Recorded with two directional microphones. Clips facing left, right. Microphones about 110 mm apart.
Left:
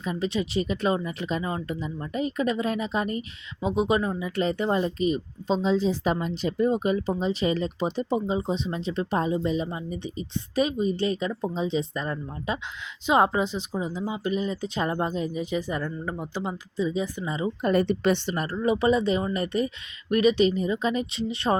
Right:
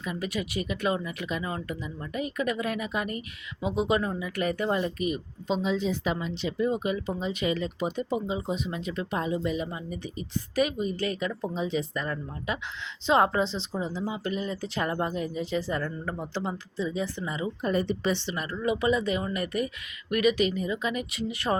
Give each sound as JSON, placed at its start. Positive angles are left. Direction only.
{"t": 0.0, "sound": "a woman's voice", "side_deg": 25}
{"t": 17.6, "sound": "a woman's voice", "side_deg": 70}
{"t": 18.5, "sound": "speech", "side_deg": 30}